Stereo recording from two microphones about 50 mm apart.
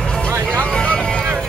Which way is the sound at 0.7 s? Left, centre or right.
Centre.